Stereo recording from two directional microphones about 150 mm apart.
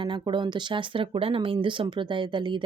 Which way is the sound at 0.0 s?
30° right (ahead or behind).